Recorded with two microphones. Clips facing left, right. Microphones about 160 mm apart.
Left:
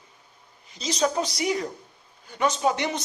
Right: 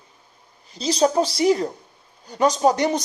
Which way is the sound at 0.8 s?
35° right (ahead or behind).